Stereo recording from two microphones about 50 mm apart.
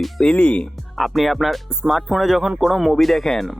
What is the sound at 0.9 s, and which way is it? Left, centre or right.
Speech, centre.